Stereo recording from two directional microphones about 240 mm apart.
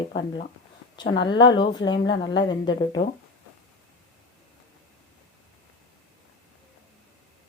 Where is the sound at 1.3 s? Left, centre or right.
Centre.